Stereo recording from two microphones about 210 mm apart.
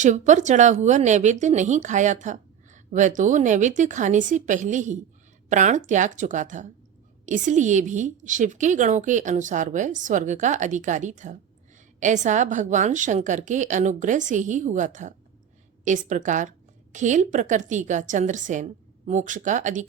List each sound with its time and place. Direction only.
0.0 s speech: 35° right (ahead or behind)